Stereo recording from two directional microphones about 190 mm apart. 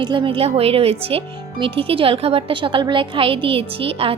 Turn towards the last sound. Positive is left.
turn(degrees=-30)  # may be behind; listen again after turning